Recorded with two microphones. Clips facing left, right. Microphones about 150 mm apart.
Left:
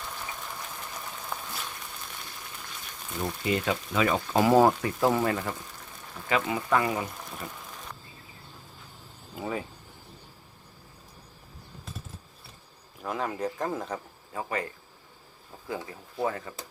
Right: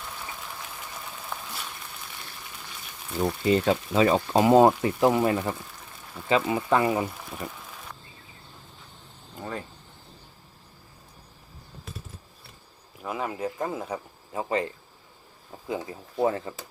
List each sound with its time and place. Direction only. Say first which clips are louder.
0.0 s a sound: even; centre (ahead or behind)
3.4 s speech: right 5 dB; 30° right (ahead or behind)
7.0 s a sound: right 4 dB; 5° right (ahead or behind)
9.3 s speech: left 2 dB; 5° left (ahead or behind)
13.0 s speech: even; 5° right (ahead or behind)
14.3 s speech: right 5 dB; 20° right (ahead or behind)